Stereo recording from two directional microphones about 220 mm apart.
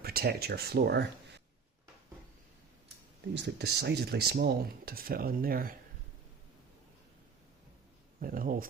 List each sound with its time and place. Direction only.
0.0 s speech: 45° right (ahead or behind)
3.3 s speech: 50° right (ahead or behind)
8.2 s speech: 40° right (ahead or behind)